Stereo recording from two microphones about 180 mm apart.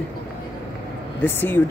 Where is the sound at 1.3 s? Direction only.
10° left (ahead or behind).